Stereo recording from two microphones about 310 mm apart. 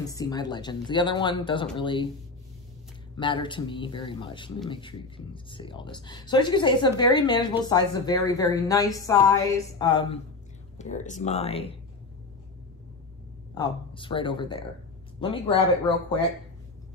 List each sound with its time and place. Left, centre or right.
0.0 s speech: centre
3.2 s speech: centre
13.6 s speech: centre